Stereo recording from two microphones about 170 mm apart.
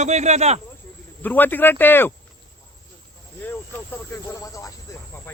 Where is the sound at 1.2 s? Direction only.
10° left (ahead or behind).